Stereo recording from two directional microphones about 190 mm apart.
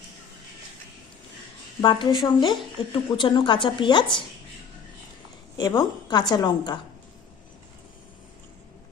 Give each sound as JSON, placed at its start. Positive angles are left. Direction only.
{"t": 1.8, "sound": "a woman's voice", "side_deg": 25}
{"t": 5.5, "sound": "a woman's voice", "side_deg": 20}